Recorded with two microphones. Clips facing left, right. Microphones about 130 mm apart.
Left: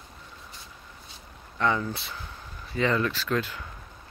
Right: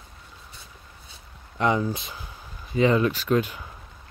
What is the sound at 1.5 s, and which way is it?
Speech, 20° right (ahead or behind).